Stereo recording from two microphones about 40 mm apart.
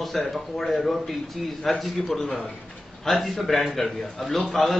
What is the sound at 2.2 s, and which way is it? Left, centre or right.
Speech, left.